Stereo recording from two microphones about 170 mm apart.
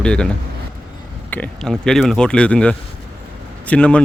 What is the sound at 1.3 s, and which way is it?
A man's voice, 5° left (ahead or behind).